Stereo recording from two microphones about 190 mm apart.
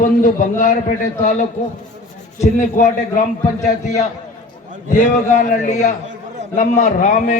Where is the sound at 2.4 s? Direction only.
40° left (ahead or behind).